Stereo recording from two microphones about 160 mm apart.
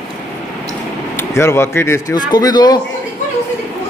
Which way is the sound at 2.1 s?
25° left (ahead or behind).